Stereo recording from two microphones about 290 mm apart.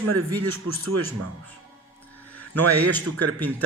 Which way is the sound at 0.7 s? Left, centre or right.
Right.